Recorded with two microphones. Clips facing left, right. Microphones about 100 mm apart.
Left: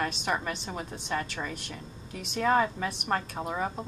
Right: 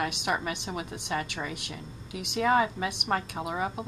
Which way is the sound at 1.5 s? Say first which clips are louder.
Right 1 dB; 70° right (ahead or behind).